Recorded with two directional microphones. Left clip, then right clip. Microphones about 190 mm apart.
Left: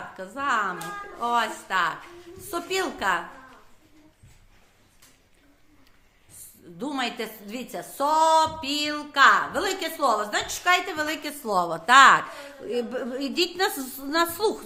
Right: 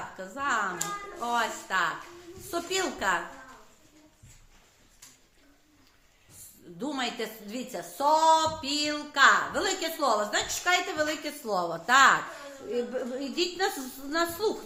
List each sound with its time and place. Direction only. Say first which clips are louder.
0.2 s a woman's voice: left 4 dB; 30° left (ahead or behind)
6.7 s a woman's voice: left 3 dB; 30° left (ahead or behind); by 14.5 s 50° left (ahead or behind)